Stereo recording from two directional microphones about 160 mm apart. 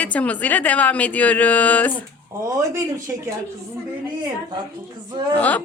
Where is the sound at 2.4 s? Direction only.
20° right (ahead or behind).